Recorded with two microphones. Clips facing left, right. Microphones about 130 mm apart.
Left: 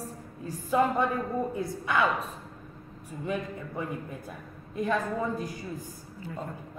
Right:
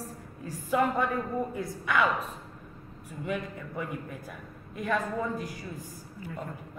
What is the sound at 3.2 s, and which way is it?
A man's voice, 25° left (ahead or behind).